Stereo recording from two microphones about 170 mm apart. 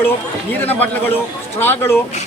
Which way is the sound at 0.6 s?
10° left (ahead or behind).